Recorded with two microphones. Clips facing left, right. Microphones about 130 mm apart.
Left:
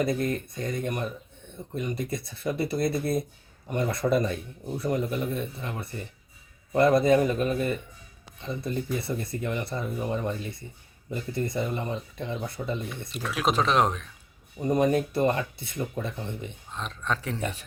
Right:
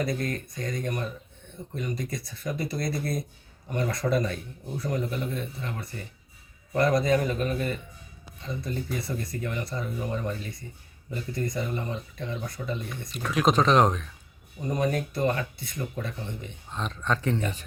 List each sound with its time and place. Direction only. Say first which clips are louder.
0.0 s speech: left 3 dB; 25° left (ahead or behind)
13.1 s speech: right 3 dB; 5° left (ahead or behind)
14.6 s speech: left 4 dB; 20° left (ahead or behind)
16.6 s speech: right 3 dB; centre (ahead or behind)